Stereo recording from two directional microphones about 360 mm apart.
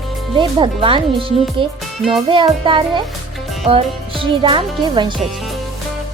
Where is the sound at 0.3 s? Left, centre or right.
Centre.